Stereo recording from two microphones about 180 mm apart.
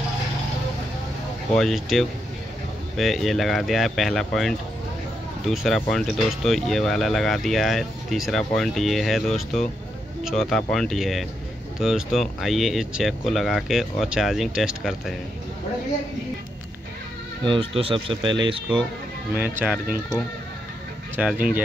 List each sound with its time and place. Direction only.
1.5 s speech: centre (ahead or behind)
17.4 s speech: 30° right (ahead or behind)
19.3 s speech: 10° right (ahead or behind)
21.2 s speech: 5° right (ahead or behind)